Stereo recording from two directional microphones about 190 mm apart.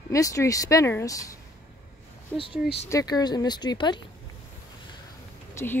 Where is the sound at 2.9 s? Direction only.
20° left (ahead or behind).